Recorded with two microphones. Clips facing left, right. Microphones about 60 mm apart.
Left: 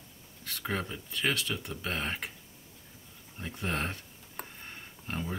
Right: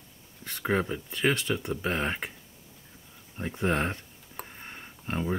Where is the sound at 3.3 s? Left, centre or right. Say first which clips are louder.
Right 7 dB; right.